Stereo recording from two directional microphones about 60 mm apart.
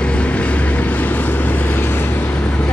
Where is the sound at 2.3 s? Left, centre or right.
Centre.